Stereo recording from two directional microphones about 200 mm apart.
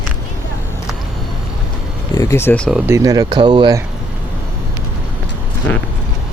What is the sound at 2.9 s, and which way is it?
Speech, 15° right (ahead or behind).